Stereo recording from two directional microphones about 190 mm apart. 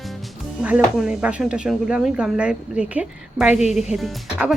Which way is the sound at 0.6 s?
5° right (ahead or behind).